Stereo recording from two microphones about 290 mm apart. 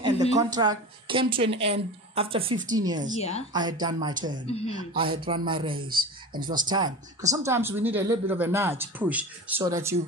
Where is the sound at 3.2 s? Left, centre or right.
Left.